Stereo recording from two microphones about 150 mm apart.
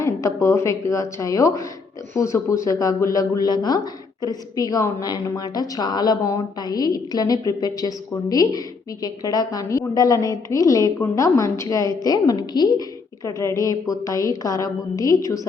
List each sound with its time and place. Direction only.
0.0 s a woman's voice: 20° left (ahead or behind)